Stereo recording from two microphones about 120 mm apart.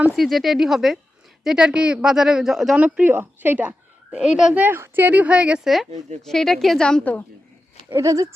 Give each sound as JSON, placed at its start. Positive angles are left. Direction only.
{"t": 0.2, "sound": "a woman's voice", "side_deg": 0}
{"t": 4.6, "sound": "a woman's voice", "side_deg": -15}
{"t": 7.9, "sound": "speech", "side_deg": -25}